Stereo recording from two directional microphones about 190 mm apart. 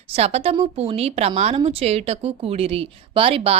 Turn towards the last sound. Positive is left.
turn(degrees=-30)  # may be behind; listen again after turning